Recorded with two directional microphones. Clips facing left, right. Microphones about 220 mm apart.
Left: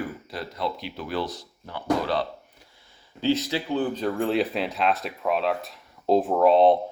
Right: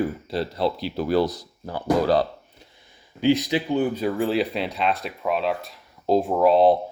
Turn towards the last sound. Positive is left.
turn(degrees=0)  # may be behind; listen again after turning